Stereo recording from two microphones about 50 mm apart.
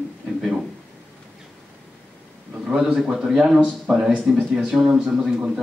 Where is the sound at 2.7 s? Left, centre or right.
Centre.